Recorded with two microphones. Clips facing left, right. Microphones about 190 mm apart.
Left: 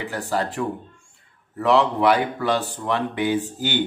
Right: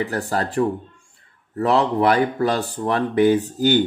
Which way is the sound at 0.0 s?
40° right (ahead or behind).